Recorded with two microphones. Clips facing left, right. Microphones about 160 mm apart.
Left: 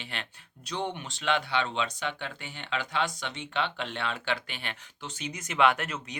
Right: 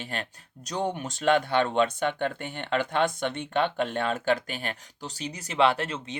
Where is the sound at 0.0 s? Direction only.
40° right (ahead or behind).